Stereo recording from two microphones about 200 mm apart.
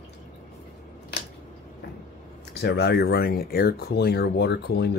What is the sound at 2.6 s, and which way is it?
Speech, 55° left (ahead or behind).